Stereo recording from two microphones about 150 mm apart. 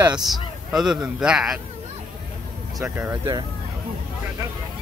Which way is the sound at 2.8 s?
15° right (ahead or behind).